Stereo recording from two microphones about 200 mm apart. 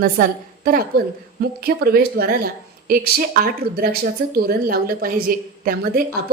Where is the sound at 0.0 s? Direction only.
45° right (ahead or behind).